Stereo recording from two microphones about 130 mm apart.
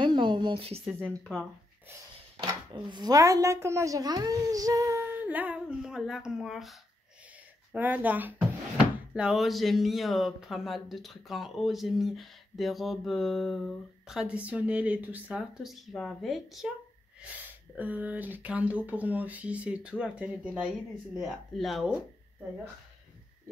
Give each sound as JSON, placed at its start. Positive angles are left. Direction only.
{"t": 0.0, "sound": "a sound", "side_deg": -35}
{"t": 2.7, "sound": "a woman's voice", "side_deg": -35}
{"t": 7.7, "sound": "speech", "side_deg": -15}
{"t": 17.2, "sound": "speech", "side_deg": -10}